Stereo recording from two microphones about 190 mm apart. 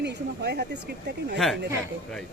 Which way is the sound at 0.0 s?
60° right (ahead or behind).